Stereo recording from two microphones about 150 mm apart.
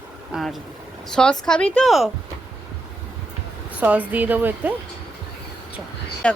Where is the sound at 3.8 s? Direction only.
10° right (ahead or behind).